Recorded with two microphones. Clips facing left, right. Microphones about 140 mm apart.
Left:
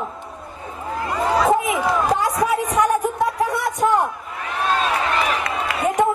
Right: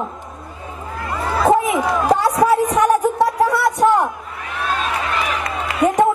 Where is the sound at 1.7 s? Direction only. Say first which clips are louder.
Right 3 dB; 35° right (ahead or behind).